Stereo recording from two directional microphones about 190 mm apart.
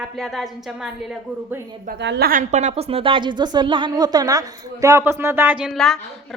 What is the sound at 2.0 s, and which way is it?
Speech, 65° right (ahead or behind).